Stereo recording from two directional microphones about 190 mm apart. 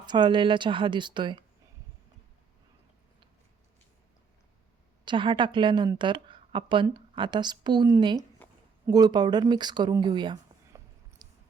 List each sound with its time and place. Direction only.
0.0 s a woman's voice: 25° right (ahead or behind)
5.0 s a woman's voice: 25° right (ahead or behind)
11.2 s chewing: 20° right (ahead or behind)